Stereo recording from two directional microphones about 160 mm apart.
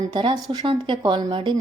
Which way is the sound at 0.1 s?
30° right (ahead or behind).